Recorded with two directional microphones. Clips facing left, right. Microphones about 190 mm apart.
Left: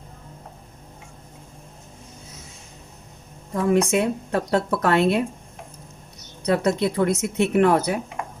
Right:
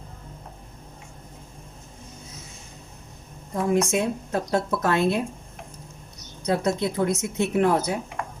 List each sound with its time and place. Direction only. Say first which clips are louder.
3.5 s speech: left 3 dB; 70° left (ahead or behind)
6.4 s speech: left 3 dB; 70° left (ahead or behind)
8.2 s dishes: left 1 dB; 20° left (ahead or behind)